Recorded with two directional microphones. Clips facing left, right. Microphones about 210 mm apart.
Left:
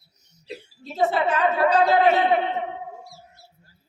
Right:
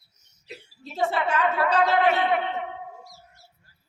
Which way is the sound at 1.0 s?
30° left (ahead or behind).